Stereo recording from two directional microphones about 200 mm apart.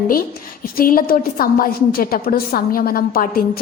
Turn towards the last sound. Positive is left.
turn(degrees=50)  # may be behind; listen again after turning